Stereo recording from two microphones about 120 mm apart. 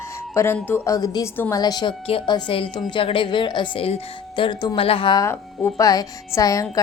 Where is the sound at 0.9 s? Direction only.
30° left (ahead or behind).